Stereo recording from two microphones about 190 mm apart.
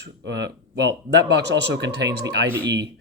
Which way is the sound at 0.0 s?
70° right (ahead or behind).